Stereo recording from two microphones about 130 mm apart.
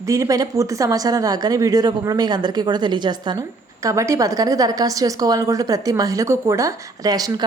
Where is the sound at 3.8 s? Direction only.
25° right (ahead or behind).